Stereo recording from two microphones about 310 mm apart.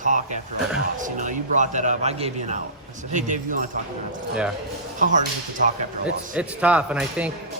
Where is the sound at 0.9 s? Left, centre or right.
Right.